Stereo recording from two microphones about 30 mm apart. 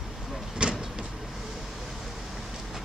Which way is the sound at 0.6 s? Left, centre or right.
Right.